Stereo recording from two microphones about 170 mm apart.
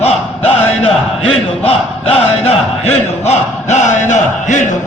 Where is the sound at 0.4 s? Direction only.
35° left (ahead or behind).